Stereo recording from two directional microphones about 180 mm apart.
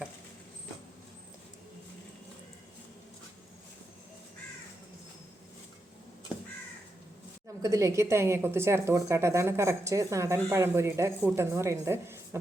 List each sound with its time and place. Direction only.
7.6 s a woman's voice: 20° right (ahead or behind)